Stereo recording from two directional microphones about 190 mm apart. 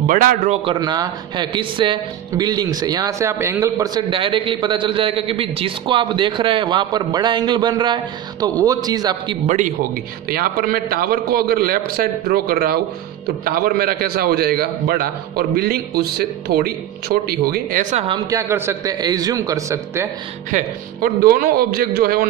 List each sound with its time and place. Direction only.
0.0 s a man's voice: 45° right (ahead or behind)
0.7 s a man's voice: 20° right (ahead or behind)
10.3 s a man's voice: 50° right (ahead or behind)
18.0 s a man's voice: 20° right (ahead or behind)
20.5 s a man's voice: 50° right (ahead or behind)